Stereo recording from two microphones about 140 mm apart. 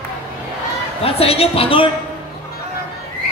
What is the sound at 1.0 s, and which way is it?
Speech, 45° left (ahead or behind).